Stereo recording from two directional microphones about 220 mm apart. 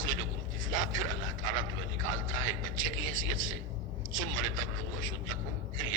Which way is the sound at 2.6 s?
65° right (ahead or behind).